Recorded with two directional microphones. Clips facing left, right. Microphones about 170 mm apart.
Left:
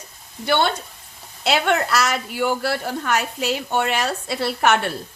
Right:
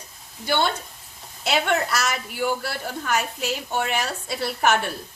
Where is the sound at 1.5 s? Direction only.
65° left (ahead or behind).